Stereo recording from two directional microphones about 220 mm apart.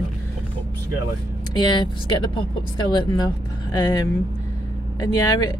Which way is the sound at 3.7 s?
20° left (ahead or behind).